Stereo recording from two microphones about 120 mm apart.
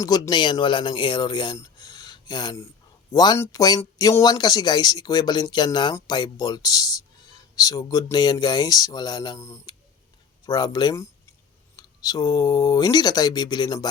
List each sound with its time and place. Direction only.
0.0 s speech: 35° left (ahead or behind)
1.5 s a sound: 30° left (ahead or behind)
3.1 s speech: 35° left (ahead or behind)